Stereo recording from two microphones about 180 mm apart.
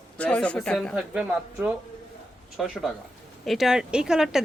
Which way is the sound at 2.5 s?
Centre (ahead or behind).